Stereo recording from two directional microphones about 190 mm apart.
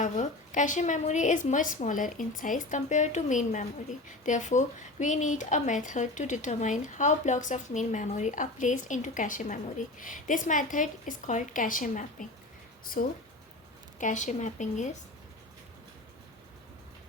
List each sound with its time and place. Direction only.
0.0 s a woman's voice: 40° left (ahead or behind)